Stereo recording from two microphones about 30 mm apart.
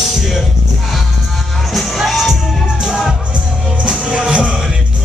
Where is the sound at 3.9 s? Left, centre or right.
Right.